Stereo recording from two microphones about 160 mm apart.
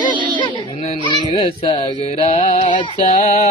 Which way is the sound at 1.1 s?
35° left (ahead or behind).